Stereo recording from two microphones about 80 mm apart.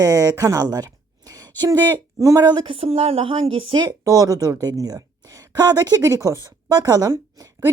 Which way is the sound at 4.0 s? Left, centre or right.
Right.